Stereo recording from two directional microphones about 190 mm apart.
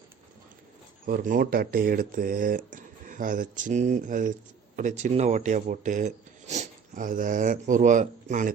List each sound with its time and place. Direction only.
1.0 s speech: 50° right (ahead or behind)